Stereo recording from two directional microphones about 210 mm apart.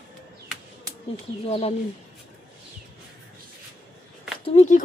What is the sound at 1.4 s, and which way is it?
Speech, 30° left (ahead or behind).